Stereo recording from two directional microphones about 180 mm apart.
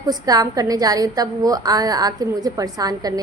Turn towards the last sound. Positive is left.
turn(degrees=-20)  # may be behind; listen again after turning